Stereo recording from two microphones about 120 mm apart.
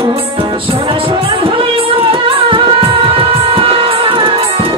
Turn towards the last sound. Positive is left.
turn(degrees=-50)  # may be behind; listen again after turning